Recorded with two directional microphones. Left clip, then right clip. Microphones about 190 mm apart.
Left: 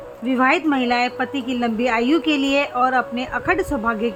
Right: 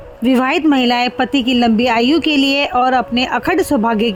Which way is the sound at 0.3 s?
40° right (ahead or behind).